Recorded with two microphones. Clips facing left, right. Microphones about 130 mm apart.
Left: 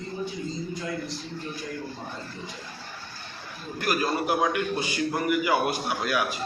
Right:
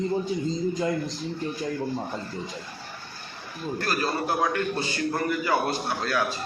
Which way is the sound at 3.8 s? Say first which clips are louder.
Left 2 dB; 15° left (ahead or behind).